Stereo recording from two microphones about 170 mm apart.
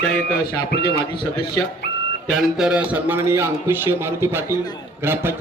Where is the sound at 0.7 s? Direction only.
70° left (ahead or behind).